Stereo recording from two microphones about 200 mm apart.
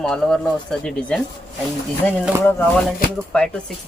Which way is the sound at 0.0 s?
5° left (ahead or behind).